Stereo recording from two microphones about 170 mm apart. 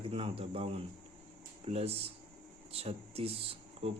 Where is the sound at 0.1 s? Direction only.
35° right (ahead or behind).